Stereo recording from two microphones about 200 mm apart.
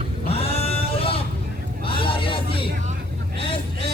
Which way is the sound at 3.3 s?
25° left (ahead or behind).